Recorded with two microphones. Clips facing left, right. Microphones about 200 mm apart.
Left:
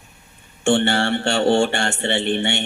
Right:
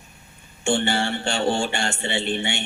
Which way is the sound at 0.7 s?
65° left (ahead or behind).